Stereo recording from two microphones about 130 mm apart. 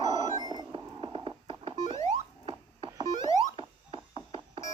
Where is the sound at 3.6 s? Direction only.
45° right (ahead or behind).